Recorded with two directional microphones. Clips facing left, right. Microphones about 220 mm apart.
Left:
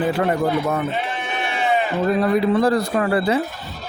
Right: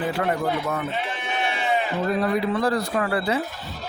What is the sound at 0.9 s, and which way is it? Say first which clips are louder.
Sheep: left 3 dB; 55° left (ahead or behind).